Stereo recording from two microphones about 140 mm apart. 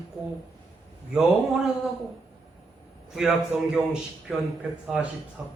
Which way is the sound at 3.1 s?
5° right (ahead or behind).